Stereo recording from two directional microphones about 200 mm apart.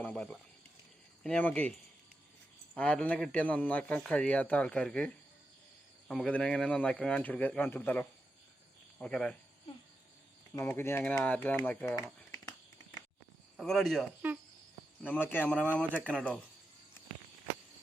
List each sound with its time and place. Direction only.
0.0 s cricket: 5° left (ahead or behind)
1.2 s a man's voice: 5° left (ahead or behind)
2.7 s a man's voice: 5° left (ahead or behind)
9.0 s cricket: 5° left (ahead or behind)
10.5 s a man's voice: 10° left (ahead or behind)
13.6 s speech: centre (ahead or behind)
15.0 s a man's voice: 10° left (ahead or behind)
15.9 s speech: 5° right (ahead or behind)